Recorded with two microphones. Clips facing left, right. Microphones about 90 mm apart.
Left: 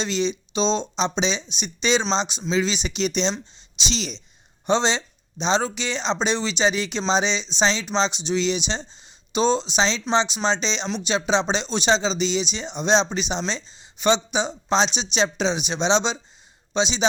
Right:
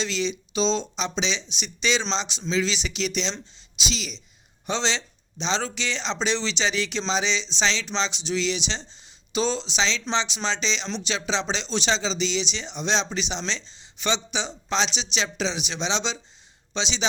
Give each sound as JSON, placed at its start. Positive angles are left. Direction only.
{"t": 0.0, "sound": "speech", "side_deg": 25}
{"t": 4.6, "sound": "speech", "side_deg": 20}
{"t": 8.9, "sound": "a sound", "side_deg": 20}
{"t": 10.2, "sound": "speech", "side_deg": 20}
{"t": 14.3, "sound": "speech", "side_deg": 25}